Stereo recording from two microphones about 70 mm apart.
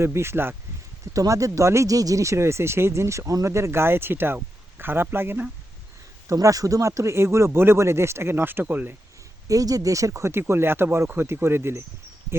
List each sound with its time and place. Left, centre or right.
0.0 s speech: right
1.1 s speech: right
6.2 s speech: right
9.5 s speech: right